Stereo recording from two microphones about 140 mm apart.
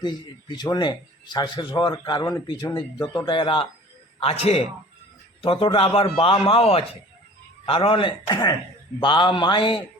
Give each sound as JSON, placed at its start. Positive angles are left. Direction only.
{"t": 0.5, "sound": "a man's voice", "side_deg": 30}